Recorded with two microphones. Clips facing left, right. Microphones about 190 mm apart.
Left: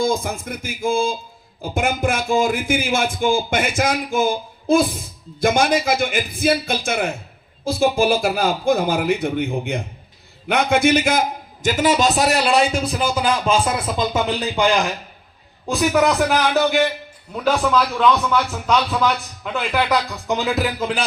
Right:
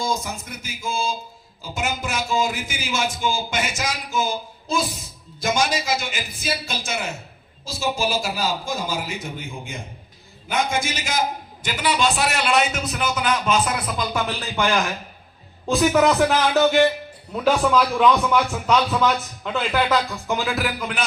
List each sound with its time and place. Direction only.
0.0 s a man's voice: 55° left (ahead or behind); by 14.8 s 15° left (ahead or behind)
15.9 s a man's voice: centre (ahead or behind)
19.7 s speech: 15° left (ahead or behind)